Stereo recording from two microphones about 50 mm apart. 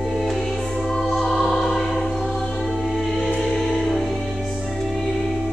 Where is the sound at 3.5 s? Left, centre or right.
Centre.